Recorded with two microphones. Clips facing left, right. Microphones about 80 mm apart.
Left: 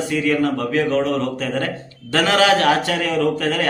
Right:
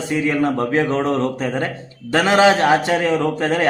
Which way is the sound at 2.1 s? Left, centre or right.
Right.